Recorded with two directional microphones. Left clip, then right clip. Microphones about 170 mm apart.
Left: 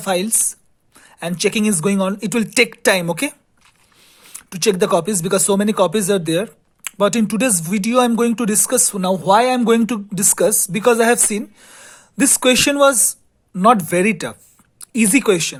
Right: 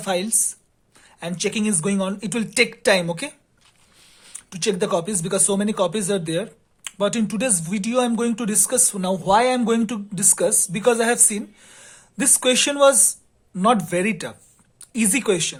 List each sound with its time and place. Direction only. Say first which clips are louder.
0.0 s speech: left 4 dB; 30° left (ahead or behind)
4.0 s a sound: left 3 dB; 25° left (ahead or behind)
4.4 s speech: left 6 dB; 35° left (ahead or behind)